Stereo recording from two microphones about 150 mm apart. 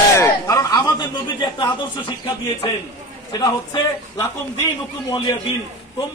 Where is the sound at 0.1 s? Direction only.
20° left (ahead or behind).